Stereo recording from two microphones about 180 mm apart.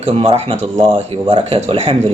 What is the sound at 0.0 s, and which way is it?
Speech, 35° right (ahead or behind).